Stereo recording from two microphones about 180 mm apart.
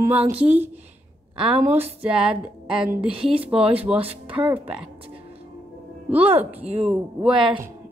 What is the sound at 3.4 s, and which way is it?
A woman's voice, 5° right (ahead or behind).